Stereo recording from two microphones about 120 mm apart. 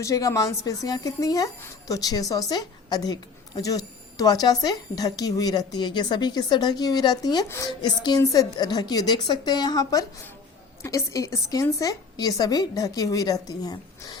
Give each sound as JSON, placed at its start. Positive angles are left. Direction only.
{"t": 0.0, "sound": "speech", "side_deg": 30}
{"t": 7.4, "sound": "a woman's voice", "side_deg": 20}
{"t": 7.7, "sound": "a woman's voice", "side_deg": 40}